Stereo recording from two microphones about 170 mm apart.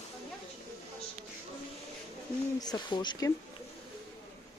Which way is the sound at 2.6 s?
25° left (ahead or behind).